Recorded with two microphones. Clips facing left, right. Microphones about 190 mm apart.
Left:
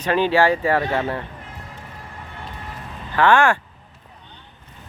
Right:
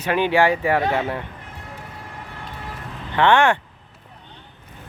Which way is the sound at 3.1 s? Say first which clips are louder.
Even; 20° right (ahead or behind).